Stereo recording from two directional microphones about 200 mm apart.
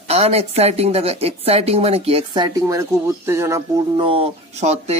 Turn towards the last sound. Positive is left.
turn(degrees=-35)  # may be behind; listen again after turning